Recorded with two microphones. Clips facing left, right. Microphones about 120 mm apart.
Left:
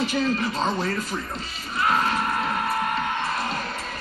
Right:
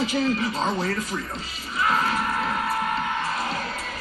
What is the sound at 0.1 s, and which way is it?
Speech, 15° right (ahead or behind).